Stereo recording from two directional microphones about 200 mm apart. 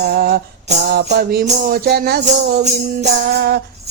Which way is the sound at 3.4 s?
55° right (ahead or behind).